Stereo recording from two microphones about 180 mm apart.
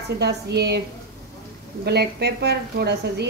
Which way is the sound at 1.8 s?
65° right (ahead or behind).